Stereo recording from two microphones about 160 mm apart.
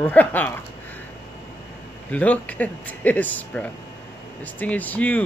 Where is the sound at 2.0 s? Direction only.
10° left (ahead or behind).